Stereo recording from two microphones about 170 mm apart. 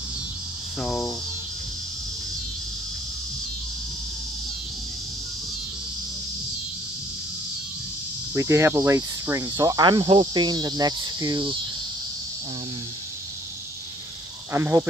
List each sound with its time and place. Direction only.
0.7 s hum: centre (ahead or behind)
8.4 s cricket: 15° right (ahead or behind)
14.5 s speech: 15° right (ahead or behind)